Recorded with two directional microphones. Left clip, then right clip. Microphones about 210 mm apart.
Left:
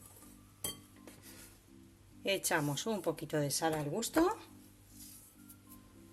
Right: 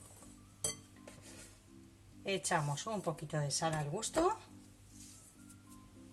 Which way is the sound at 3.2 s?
45° left (ahead or behind).